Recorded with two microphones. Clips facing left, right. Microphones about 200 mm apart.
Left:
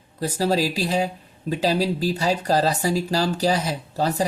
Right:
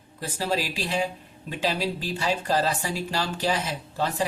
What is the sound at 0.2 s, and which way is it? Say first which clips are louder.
Speech: left 6 dB; 40° left (ahead or behind).